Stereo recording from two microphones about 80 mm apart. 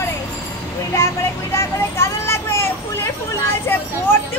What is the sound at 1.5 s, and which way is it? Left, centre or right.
Vehicle, left.